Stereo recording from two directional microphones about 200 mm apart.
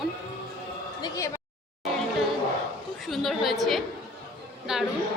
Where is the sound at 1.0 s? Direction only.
15° left (ahead or behind).